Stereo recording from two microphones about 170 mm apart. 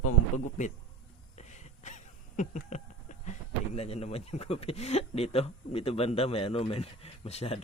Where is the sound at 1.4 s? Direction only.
45° left (ahead or behind).